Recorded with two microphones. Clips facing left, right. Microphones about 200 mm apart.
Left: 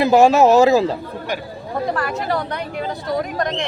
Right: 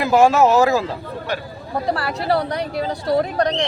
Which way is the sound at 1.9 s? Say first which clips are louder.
Right 3 dB; 35° right (ahead or behind).